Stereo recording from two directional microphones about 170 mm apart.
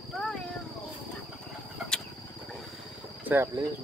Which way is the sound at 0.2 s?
Centre (ahead or behind).